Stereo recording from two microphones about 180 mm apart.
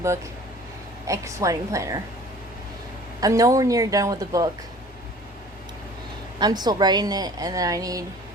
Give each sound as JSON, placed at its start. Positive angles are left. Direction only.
{"t": 1.0, "sound": "a woman's voice", "side_deg": -15}
{"t": 3.2, "sound": "speech", "side_deg": -20}
{"t": 6.4, "sound": "speech", "side_deg": -25}